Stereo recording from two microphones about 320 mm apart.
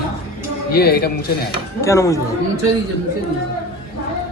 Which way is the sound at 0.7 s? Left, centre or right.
Left.